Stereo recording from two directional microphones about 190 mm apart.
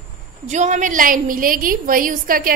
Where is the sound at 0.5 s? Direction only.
40° right (ahead or behind).